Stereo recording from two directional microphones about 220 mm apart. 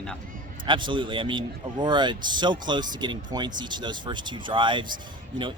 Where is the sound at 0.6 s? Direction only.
20° right (ahead or behind).